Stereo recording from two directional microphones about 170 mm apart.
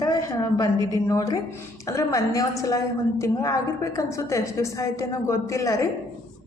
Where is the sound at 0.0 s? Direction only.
20° left (ahead or behind).